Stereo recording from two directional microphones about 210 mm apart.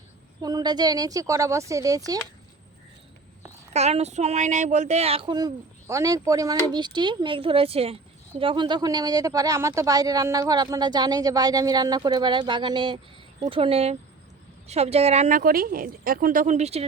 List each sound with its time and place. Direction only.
0.4 s speech: 20° right (ahead or behind)
3.7 s speech: 30° right (ahead or behind)